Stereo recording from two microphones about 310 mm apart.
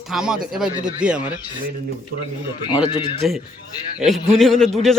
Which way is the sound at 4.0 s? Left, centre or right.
Centre.